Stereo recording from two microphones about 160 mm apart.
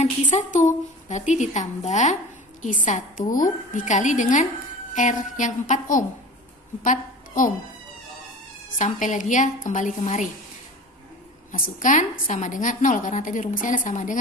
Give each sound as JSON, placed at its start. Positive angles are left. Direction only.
{"t": 0.0, "sound": "a woman's voice", "side_deg": 50}
{"t": 8.8, "sound": "a woman's voice", "side_deg": 50}
{"t": 11.5, "sound": "a woman's voice", "side_deg": 55}